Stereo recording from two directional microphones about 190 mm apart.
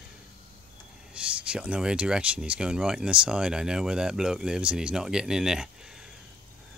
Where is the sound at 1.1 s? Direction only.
5° right (ahead or behind).